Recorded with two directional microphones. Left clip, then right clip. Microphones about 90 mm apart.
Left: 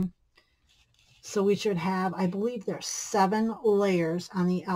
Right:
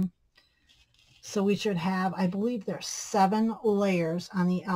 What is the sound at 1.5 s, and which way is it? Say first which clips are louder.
Speech: left 2 dB; 20° left (ahead or behind).